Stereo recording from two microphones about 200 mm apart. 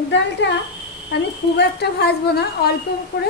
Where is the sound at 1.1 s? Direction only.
60° left (ahead or behind).